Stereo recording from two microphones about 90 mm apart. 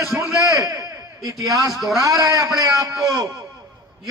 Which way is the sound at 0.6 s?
40° right (ahead or behind).